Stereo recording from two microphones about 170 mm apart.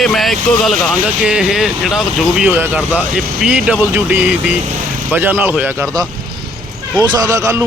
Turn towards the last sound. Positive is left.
turn(degrees=-20)  # may be behind; listen again after turning